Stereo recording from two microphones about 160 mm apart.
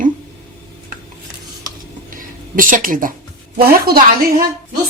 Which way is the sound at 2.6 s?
55° right (ahead or behind).